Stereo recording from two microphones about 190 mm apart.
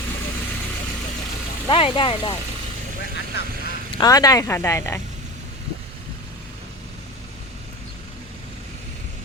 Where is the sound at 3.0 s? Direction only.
65° left (ahead or behind).